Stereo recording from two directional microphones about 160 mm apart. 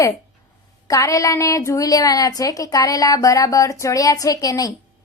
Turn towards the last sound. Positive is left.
turn(degrees=20)  # may be behind; listen again after turning